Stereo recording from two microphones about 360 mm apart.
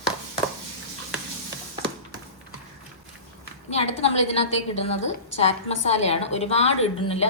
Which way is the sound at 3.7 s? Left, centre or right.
Centre.